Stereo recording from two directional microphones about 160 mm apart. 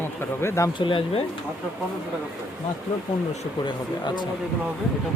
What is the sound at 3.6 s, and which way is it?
Speech, 30° left (ahead or behind).